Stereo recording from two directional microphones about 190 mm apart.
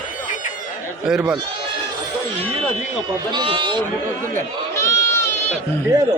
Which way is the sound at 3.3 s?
25° right (ahead or behind).